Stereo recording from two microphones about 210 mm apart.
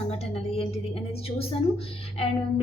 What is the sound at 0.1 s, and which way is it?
A woman's voice, 30° left (ahead or behind).